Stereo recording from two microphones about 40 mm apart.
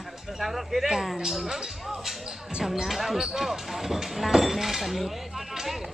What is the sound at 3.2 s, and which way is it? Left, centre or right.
Speech, centre.